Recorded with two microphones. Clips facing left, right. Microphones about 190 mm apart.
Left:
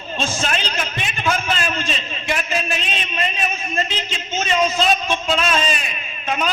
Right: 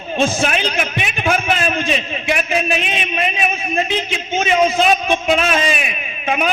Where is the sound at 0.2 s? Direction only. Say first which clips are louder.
Right 7 dB; 60° right (ahead or behind).